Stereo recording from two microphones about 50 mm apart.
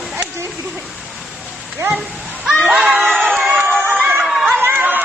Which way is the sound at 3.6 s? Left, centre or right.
Right.